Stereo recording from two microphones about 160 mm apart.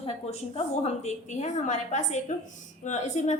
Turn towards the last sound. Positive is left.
turn(degrees=45)  # may be behind; listen again after turning